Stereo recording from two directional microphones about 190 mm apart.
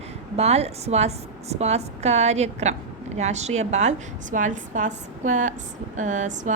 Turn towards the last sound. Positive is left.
turn(degrees=-40)  # may be behind; listen again after turning